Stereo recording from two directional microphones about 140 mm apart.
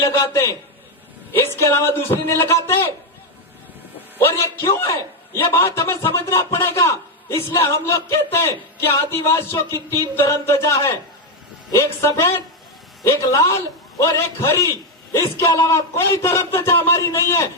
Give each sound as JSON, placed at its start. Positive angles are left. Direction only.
{"t": 0.0, "sound": "a man's voice", "side_deg": 20}
{"t": 4.2, "sound": "a man's voice", "side_deg": 15}